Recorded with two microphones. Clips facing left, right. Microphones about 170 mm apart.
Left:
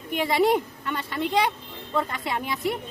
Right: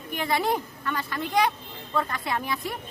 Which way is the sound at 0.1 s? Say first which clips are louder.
Left 5 dB; 20° left (ahead or behind).